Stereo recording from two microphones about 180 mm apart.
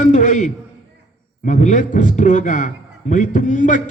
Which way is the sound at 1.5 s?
40° left (ahead or behind).